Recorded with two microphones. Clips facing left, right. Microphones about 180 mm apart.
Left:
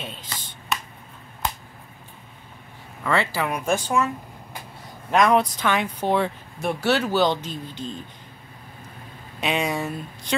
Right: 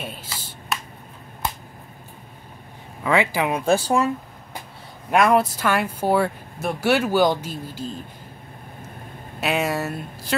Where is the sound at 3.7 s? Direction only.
35° right (ahead or behind).